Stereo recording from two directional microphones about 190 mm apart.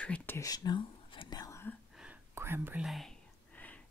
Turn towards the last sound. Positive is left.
turn(degrees=10)  # may be behind; listen again after turning